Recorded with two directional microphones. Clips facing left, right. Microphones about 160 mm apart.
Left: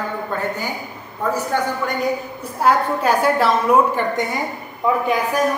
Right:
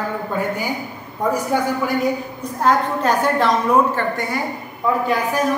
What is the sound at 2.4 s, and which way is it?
A woman's voice, 10° left (ahead or behind).